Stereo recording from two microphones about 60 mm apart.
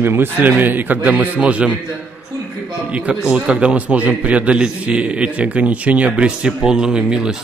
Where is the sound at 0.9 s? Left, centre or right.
Centre.